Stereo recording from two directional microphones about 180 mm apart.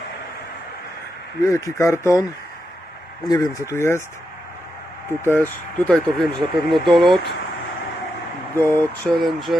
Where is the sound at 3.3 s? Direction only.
15° left (ahead or behind).